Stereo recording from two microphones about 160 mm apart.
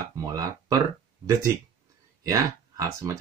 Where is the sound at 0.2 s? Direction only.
20° right (ahead or behind).